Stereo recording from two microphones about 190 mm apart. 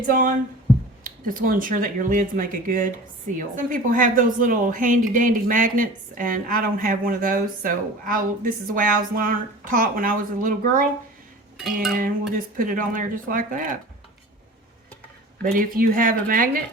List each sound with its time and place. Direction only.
0.0 s speech: 45° right (ahead or behind)
12.5 s speech: 45° right (ahead or behind)
15.4 s speech: 50° right (ahead or behind)